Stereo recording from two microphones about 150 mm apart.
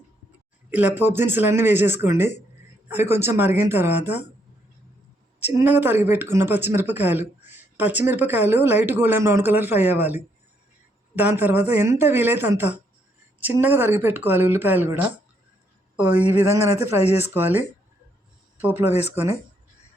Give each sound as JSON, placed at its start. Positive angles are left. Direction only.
{"t": 0.7, "sound": "speech", "side_deg": -10}
{"t": 5.4, "sound": "a woman's voice", "side_deg": -15}